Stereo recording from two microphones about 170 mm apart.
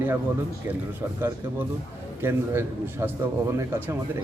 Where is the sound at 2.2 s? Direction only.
15° right (ahead or behind).